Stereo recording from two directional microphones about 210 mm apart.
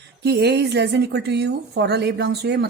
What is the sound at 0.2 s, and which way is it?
A woman's voice, 50° right (ahead or behind).